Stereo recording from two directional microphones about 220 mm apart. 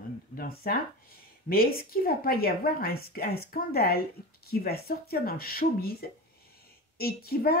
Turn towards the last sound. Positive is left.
turn(degrees=45)  # may be behind; listen again after turning